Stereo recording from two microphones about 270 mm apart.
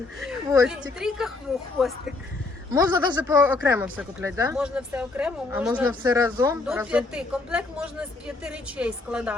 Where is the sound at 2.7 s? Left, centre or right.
Centre.